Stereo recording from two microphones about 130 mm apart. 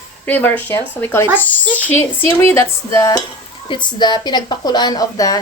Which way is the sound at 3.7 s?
35° left (ahead or behind).